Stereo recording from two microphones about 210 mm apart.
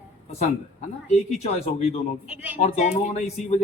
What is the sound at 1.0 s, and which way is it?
Speech, 30° left (ahead or behind).